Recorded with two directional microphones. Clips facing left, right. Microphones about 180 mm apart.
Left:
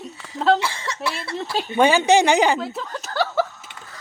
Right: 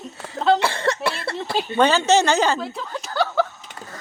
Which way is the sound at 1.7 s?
10° left (ahead or behind).